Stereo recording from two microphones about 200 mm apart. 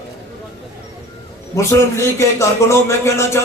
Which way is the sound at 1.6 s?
15° left (ahead or behind).